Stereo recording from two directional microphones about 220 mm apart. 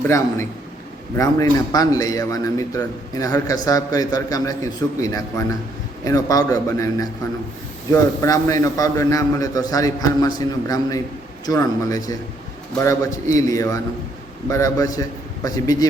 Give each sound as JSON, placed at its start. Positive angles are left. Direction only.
{"t": 1.1, "sound": "a man's voice", "side_deg": 15}